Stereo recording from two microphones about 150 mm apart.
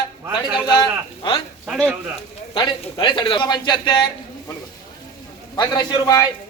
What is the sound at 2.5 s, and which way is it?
A man's voice, 30° left (ahead or behind).